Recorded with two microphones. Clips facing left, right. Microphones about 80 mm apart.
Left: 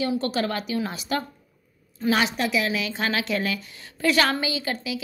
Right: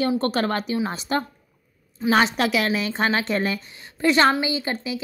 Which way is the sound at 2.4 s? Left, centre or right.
Right.